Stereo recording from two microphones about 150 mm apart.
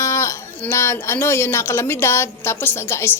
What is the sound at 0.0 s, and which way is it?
A woman's voice, 20° left (ahead or behind).